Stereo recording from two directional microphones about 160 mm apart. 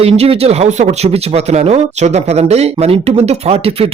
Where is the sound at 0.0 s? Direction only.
40° right (ahead or behind).